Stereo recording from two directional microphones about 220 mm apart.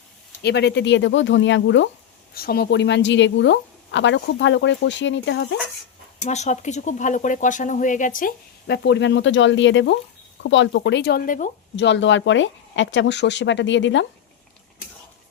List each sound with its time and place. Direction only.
0.4 s a woman's voice: 50° left (ahead or behind)
2.3 s a woman's voice: 45° left (ahead or behind)
6.2 s speech: 30° left (ahead or behind)
11.8 s a woman's voice: 55° left (ahead or behind)